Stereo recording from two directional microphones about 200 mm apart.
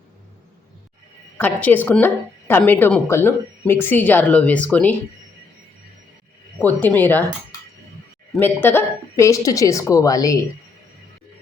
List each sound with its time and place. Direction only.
1.4 s a woman's voice: 10° left (ahead or behind)
6.6 s a woman's voice: 10° left (ahead or behind)
8.4 s a woman's voice: 10° left (ahead or behind)